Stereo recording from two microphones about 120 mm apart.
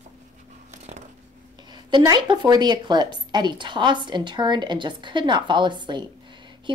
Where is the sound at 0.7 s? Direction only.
70° right (ahead or behind).